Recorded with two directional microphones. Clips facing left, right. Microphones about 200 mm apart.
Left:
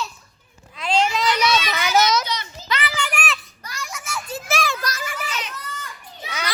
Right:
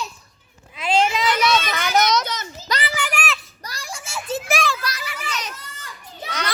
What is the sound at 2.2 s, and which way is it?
Children playing, 45° right (ahead or behind).